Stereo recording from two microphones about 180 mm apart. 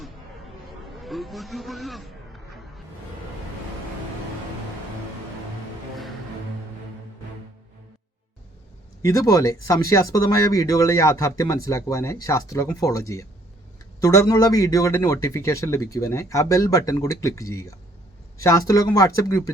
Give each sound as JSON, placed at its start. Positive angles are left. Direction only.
{"t": 0.9, "sound": "a man's voice", "side_deg": 0}
{"t": 9.0, "sound": "speech", "side_deg": 20}